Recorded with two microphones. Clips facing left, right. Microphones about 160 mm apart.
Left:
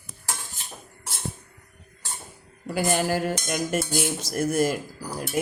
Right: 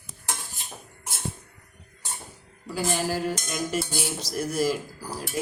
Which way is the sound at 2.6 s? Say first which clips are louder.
Left 3 dB; 55° left (ahead or behind).